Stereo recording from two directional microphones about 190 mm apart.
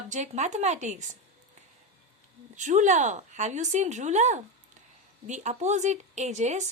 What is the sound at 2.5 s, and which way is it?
A woman's voice, 40° right (ahead or behind).